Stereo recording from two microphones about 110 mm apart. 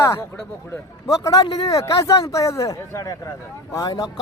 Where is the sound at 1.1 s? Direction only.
35° left (ahead or behind).